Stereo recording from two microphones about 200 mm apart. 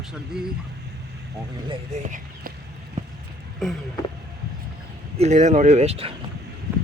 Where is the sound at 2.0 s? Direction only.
40° right (ahead or behind).